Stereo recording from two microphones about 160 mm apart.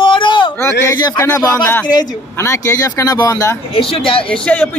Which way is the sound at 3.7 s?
35° left (ahead or behind).